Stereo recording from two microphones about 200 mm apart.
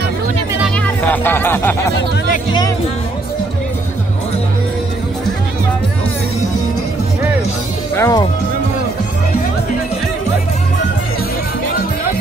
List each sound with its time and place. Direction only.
0.7 s speech: 10° left (ahead or behind)
7.9 s speech: 15° left (ahead or behind)